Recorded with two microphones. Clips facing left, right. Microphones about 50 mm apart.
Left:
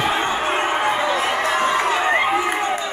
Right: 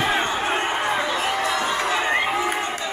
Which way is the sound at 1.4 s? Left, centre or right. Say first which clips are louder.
Left 4 dB; left.